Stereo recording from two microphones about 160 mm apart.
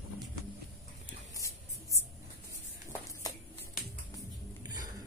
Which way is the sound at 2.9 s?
20° left (ahead or behind).